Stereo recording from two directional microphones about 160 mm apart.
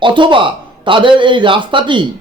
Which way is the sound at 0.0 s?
30° right (ahead or behind).